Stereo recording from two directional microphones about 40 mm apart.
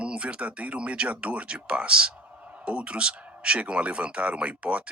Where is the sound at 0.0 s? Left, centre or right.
Right.